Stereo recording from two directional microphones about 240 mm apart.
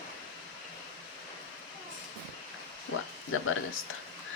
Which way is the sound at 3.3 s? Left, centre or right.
Left.